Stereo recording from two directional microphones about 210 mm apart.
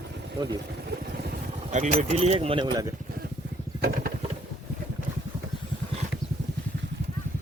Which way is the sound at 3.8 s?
45° right (ahead or behind).